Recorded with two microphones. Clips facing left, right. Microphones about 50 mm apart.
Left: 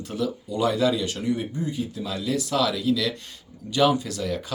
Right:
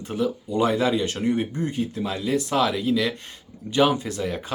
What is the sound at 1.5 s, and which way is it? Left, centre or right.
Speech, right.